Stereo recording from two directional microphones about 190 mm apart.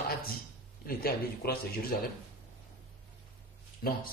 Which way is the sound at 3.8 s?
55° left (ahead or behind).